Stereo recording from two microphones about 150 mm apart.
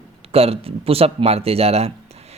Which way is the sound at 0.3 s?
40° right (ahead or behind).